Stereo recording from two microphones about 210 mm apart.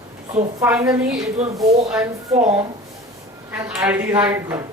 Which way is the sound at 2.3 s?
30° right (ahead or behind).